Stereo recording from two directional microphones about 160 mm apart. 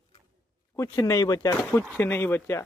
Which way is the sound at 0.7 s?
20° left (ahead or behind).